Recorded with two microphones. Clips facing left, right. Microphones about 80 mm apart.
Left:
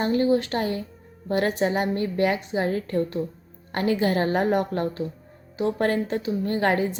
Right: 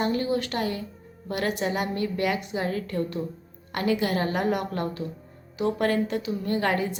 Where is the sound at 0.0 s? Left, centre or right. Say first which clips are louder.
Left 4 dB; left.